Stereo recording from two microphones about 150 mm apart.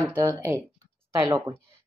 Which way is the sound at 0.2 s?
20° right (ahead or behind).